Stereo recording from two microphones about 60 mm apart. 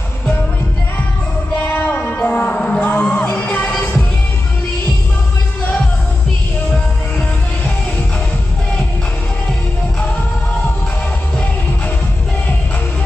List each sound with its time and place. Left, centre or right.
1.6 s music: left
2.8 s music: left